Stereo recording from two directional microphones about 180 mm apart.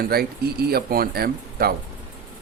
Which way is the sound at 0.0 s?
60° right (ahead or behind).